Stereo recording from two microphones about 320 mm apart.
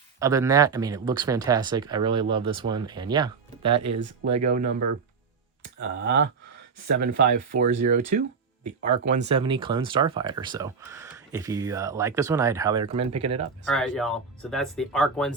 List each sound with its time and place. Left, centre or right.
0.2 s speech: centre; by 6.2 s right
7.3 s speech: right
13.7 s speech: centre